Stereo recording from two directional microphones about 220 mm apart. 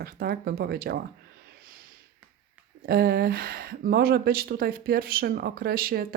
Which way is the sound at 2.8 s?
45° right (ahead or behind).